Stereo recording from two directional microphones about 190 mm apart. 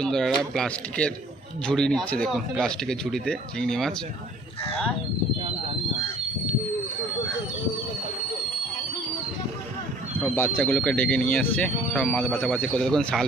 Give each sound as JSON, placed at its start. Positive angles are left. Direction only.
{"t": 0.0, "sound": "speech", "side_deg": 0}
{"t": 10.2, "sound": "speech", "side_deg": 10}